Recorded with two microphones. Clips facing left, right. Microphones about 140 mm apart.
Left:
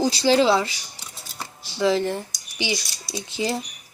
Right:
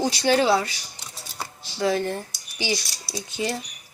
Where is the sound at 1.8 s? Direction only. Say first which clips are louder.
Left 2 dB; 25° left (ahead or behind).